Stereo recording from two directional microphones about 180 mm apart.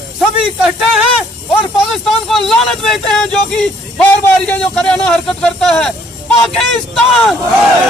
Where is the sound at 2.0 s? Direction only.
Centre (ahead or behind).